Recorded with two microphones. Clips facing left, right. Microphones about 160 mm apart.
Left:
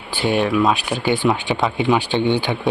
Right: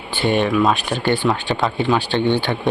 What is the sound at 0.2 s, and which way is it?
Speech, centre (ahead or behind).